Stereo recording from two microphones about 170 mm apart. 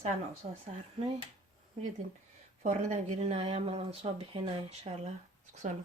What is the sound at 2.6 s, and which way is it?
Speech, 40° right (ahead or behind).